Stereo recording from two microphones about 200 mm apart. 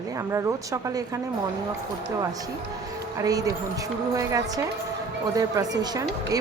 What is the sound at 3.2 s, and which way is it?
A woman's voice, 15° right (ahead or behind).